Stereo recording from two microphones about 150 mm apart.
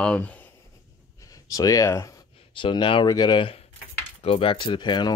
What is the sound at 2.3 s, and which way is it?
Speech, 35° left (ahead or behind).